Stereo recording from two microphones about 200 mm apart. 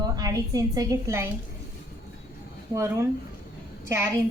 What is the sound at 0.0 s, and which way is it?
A woman's voice, 20° right (ahead or behind).